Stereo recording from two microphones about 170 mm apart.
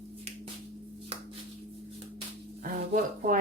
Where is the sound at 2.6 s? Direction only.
55° right (ahead or behind).